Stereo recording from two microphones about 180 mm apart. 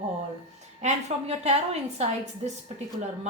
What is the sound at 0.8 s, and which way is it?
Speech, 35° right (ahead or behind).